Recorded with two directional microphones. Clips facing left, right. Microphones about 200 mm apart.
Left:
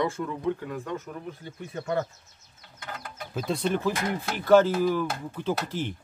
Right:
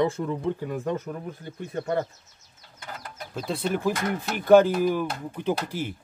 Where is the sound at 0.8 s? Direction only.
50° right (ahead or behind).